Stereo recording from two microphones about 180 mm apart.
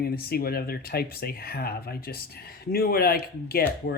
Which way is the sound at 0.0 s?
60° left (ahead or behind).